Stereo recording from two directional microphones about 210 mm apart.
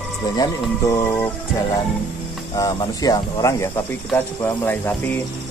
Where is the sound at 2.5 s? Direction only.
20° left (ahead or behind).